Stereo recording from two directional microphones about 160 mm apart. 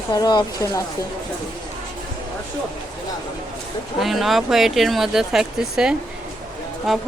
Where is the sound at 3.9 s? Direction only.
Centre (ahead or behind).